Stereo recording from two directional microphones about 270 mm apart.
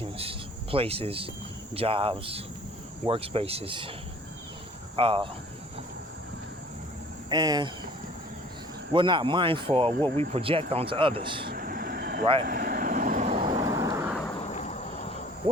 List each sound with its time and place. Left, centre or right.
0.0 s cricket: centre
1.7 s speech: right
4.9 s speech: centre
7.3 s speech: centre
8.9 s speech: centre
11.4 s vehicle: right
12.2 s speech: centre
12.5 s vehicle: right; by 14.2 s centre
14.3 s a sound: left